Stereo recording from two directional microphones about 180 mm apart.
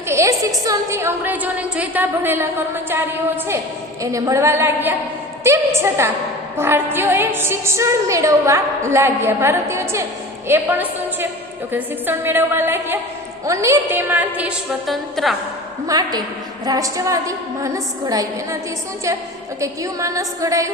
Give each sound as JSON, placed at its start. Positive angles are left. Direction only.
{"t": 0.1, "sound": "a woman's voice", "side_deg": -15}
{"t": 4.0, "sound": "a woman's voice", "side_deg": -15}
{"t": 15.9, "sound": "a woman's voice", "side_deg": -20}
{"t": 19.5, "sound": "a woman's voice", "side_deg": -20}